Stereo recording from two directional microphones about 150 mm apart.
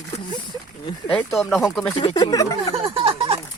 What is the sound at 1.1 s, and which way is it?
Speech, centre (ahead or behind).